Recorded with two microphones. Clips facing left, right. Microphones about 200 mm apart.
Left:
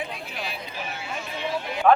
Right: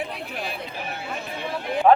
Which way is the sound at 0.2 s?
55° right (ahead or behind).